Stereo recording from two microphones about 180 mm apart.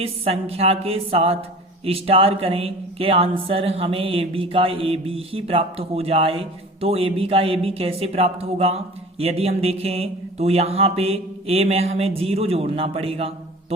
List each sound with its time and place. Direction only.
0.0 s a woman's voice: 35° right (ahead or behind)